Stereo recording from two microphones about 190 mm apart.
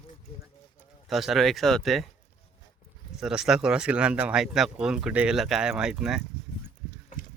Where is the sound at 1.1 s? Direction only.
Centre (ahead or behind).